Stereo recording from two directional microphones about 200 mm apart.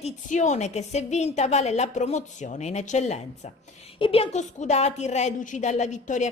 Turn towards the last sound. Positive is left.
turn(degrees=35)  # may be behind; listen again after turning